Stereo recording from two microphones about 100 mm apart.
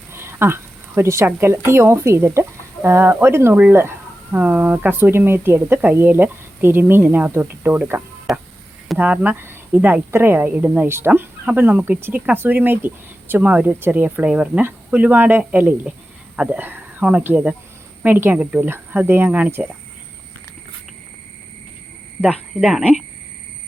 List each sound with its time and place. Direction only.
0.1 s speech: 25° right (ahead or behind)
8.3 s a sound: centre (ahead or behind)
9.0 s speech: 15° right (ahead or behind)
22.6 s speech: 10° right (ahead or behind)